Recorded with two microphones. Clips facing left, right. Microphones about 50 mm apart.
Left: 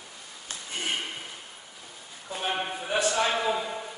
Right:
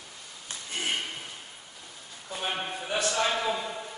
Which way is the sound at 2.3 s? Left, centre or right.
Centre.